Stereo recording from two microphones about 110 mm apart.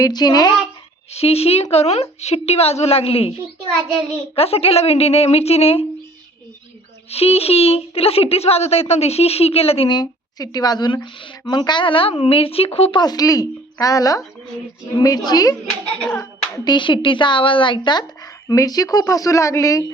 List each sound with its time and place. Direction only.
0.0 s speech: 40° left (ahead or behind)
1.1 s a woman's voice: 65° left (ahead or behind)
4.4 s speech: 65° left (ahead or behind)
7.1 s speech: 65° left (ahead or behind)
9.9 s a woman's voice: 35° left (ahead or behind); by 13.0 s 65° left (ahead or behind)
13.0 s speech: 35° left (ahead or behind)
16.6 s speech: 45° left (ahead or behind); by 19.8 s 30° left (ahead or behind)